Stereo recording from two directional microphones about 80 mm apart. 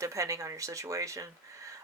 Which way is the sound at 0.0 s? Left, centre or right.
Right.